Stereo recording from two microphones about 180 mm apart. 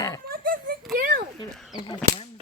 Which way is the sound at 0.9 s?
50° right (ahead or behind).